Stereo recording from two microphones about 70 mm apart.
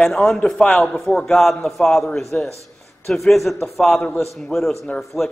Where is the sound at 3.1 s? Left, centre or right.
Centre.